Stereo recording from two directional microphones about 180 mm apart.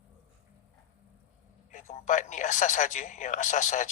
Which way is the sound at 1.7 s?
45° left (ahead or behind).